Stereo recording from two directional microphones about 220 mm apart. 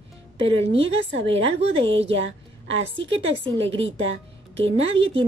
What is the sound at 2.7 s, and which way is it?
Speech, 60° right (ahead or behind).